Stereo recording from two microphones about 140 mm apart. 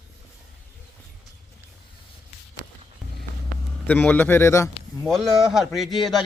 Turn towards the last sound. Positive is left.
turn(degrees=0)  # may be behind; listen again after turning